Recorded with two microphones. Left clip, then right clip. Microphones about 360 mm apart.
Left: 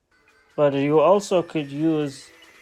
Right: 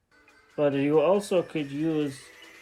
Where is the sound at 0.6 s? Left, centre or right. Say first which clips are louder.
Left 5 dB; centre.